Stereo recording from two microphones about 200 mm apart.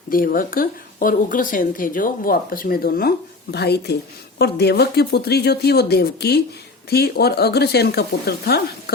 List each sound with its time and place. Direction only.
0.1 s speech: 45° left (ahead or behind)